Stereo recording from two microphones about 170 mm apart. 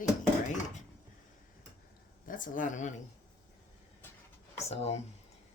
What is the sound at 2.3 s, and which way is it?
Speech, 50° left (ahead or behind).